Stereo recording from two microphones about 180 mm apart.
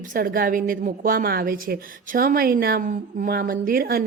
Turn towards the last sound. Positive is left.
turn(degrees=-55)  # may be behind; listen again after turning